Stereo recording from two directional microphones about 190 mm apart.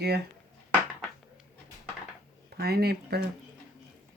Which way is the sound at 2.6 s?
55° right (ahead or behind).